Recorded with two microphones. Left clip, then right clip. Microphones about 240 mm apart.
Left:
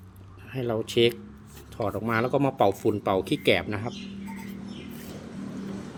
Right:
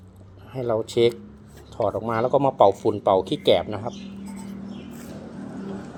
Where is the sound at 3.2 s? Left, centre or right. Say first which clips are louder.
Right 4 dB; centre.